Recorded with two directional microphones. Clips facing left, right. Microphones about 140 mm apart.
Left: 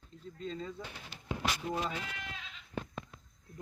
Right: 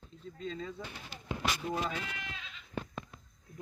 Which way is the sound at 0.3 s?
40° left (ahead or behind).